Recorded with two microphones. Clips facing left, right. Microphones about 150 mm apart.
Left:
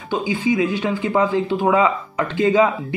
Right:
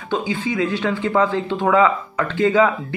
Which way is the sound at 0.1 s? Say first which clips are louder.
Left 2 dB; 10° left (ahead or behind).